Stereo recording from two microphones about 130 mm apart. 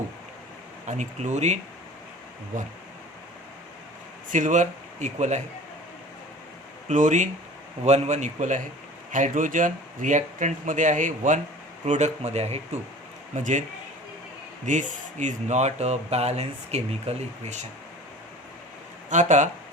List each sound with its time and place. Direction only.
0.9 s speech: 65° right (ahead or behind)
4.3 s speech: 80° right
6.8 s speech: 75° right (ahead or behind)
7.9 s speech: 60° right (ahead or behind)
9.1 s speech: 85° right
11.9 s speech: 65° right (ahead or behind)
13.3 s speech: 70° right (ahead or behind)
14.7 s speech: 70° right (ahead or behind)
19.1 s speech: 70° right (ahead or behind)